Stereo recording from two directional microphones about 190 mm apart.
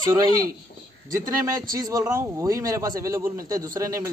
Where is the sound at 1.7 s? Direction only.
20° right (ahead or behind).